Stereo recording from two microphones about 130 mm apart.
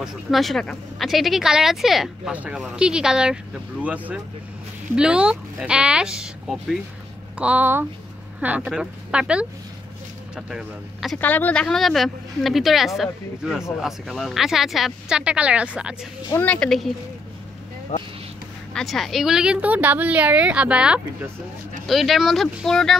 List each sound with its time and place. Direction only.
0.0 s a woman's voice: centre (ahead or behind)
11.1 s speech: 15° left (ahead or behind); by 16.1 s 5° right (ahead or behind)
16.3 s a woman's voice: 15° left (ahead or behind)
16.5 s speech: 5° left (ahead or behind)
17.9 s speech: 65° left (ahead or behind)
18.7 s a woman's voice: 5° left (ahead or behind)